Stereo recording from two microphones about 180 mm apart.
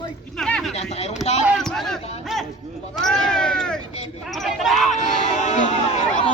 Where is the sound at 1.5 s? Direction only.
Centre (ahead or behind).